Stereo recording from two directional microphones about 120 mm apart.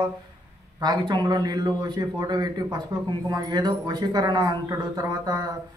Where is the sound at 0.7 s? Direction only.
35° right (ahead or behind).